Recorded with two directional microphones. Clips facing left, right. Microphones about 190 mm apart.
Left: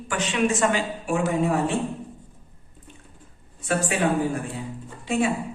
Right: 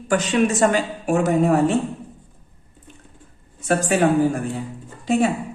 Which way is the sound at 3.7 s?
40° right (ahead or behind).